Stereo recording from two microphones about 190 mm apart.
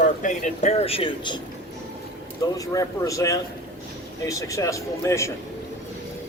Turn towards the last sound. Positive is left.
turn(degrees=15)  # may be behind; listen again after turning